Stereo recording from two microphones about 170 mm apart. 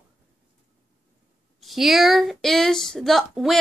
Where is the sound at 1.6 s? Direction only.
Centre (ahead or behind).